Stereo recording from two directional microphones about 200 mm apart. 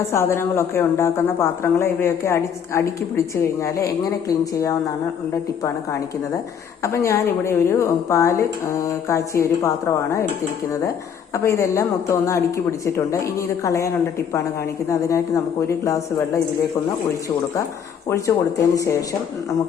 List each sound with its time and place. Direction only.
0.0 s a woman's voice: 15° left (ahead or behind)
11.3 s a woman's voice: 15° left (ahead or behind)
18.1 s a woman's voice: 15° left (ahead or behind)